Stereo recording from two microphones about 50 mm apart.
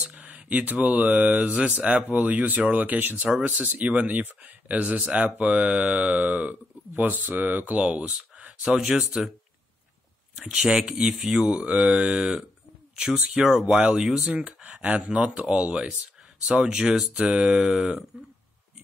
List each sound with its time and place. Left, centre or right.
0.1 s speech: right
7.8 s speech: right
8.7 s speech: centre
10.4 s speech: centre
10.7 s speech: centre
11.2 s speech: centre
13.5 s speech: centre
14.8 s speech: right
16.8 s speech: centre